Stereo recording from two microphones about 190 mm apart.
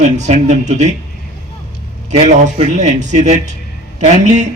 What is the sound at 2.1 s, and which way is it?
A man's voice, 35° right (ahead or behind).